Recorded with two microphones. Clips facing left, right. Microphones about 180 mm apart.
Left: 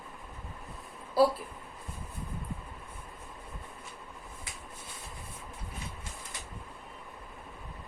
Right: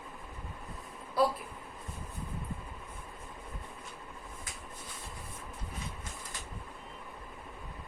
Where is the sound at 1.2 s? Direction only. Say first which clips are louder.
Left 4 dB; 30° left (ahead or behind).